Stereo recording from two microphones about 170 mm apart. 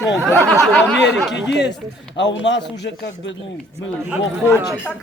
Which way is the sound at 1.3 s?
90° left.